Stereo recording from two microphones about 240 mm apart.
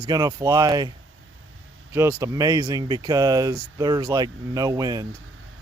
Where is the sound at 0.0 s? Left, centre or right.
Centre.